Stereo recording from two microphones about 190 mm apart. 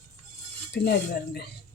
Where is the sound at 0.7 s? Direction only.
60° left (ahead or behind).